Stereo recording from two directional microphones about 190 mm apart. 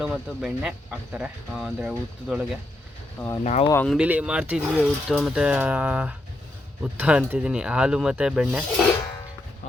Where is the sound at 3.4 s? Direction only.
35° left (ahead or behind).